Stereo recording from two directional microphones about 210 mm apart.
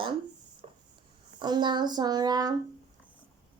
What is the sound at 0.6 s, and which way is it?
Writing, 30° right (ahead or behind).